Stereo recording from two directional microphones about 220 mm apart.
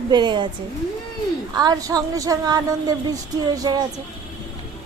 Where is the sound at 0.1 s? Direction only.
20° right (ahead or behind).